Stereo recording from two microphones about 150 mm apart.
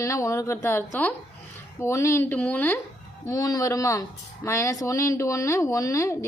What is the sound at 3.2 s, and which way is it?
A woman's voice, 20° left (ahead or behind).